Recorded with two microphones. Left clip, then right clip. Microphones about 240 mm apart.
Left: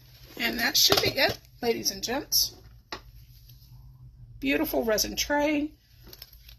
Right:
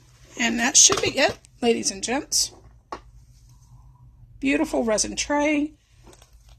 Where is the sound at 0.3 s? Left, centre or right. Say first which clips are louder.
Right 5 dB; right.